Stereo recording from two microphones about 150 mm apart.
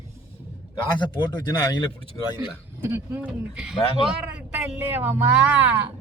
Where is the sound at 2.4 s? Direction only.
15° right (ahead or behind).